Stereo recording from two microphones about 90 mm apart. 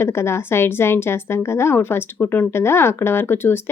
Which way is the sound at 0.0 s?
30° left (ahead or behind).